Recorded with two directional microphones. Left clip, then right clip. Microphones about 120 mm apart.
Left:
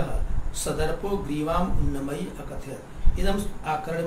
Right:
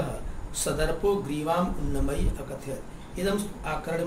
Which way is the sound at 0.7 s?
40° right (ahead or behind).